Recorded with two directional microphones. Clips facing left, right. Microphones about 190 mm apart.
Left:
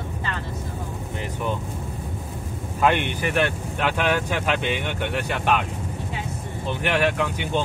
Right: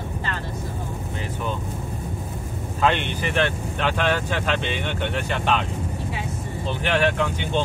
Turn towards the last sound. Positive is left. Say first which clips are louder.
# right 1 dB
turn(degrees=10)  # may be behind; listen again after turning